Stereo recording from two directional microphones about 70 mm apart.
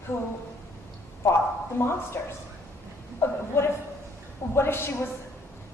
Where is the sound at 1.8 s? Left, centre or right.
Left.